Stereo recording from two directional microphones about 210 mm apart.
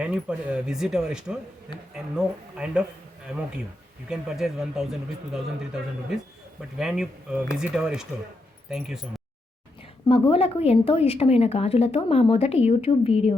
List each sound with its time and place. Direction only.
0.0 s speech: 5° right (ahead or behind)
4.1 s speech: centre (ahead or behind)
10.1 s a woman's voice: 25° left (ahead or behind)